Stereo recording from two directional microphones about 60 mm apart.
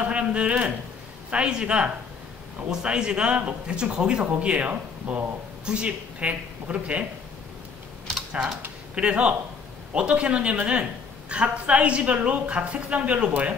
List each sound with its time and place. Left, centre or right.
0.0 s a woman's voice: centre
8.9 s a woman's voice: centre